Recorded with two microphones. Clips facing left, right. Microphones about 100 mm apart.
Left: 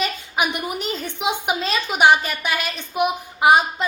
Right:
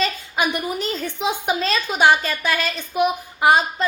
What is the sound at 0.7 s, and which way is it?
A woman's voice, 15° left (ahead or behind).